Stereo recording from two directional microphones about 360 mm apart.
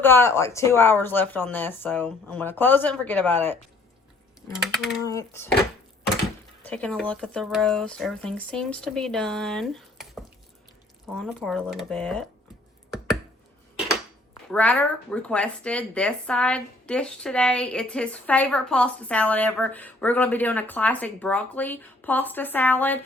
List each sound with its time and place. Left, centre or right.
0.0 s a woman's voice: centre
6.6 s a woman's voice: centre
14.5 s a woman's voice: centre